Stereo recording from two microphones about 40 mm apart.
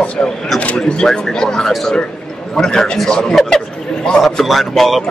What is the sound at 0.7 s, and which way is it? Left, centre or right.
A man's voice, left.